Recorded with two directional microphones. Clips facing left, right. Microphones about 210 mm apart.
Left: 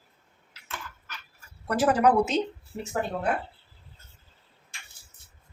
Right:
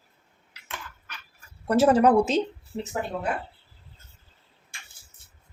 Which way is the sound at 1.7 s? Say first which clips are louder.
Right 4 dB; 25° right (ahead or behind).